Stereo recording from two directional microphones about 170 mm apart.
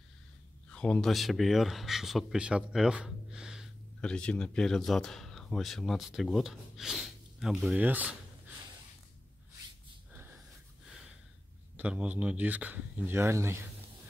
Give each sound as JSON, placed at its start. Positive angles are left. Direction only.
{"t": 0.7, "sound": "speech", "side_deg": 5}
{"t": 11.7, "sound": "speech", "side_deg": -5}